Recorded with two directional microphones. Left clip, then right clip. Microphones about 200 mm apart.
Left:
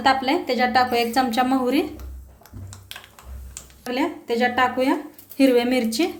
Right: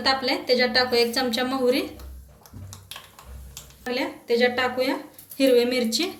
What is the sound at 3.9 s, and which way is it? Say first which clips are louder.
A woman's voice: left 1 dB; 40° left (ahead or behind).